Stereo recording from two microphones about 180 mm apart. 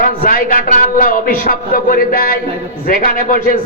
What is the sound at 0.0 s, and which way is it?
A man's voice, 55° left (ahead or behind).